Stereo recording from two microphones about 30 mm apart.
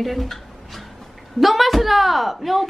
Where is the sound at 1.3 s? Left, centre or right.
Centre.